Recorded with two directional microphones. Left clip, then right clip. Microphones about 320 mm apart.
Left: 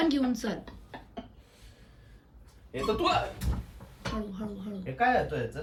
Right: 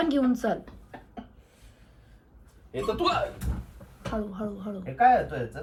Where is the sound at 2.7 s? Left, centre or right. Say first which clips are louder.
Right 1 dB; centre.